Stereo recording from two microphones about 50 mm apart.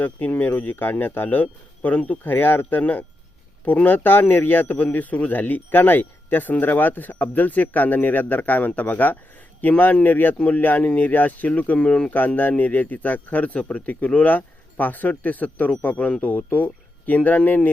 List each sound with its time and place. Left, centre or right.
0.0 s a man's voice: left
12.4 s a man's voice: left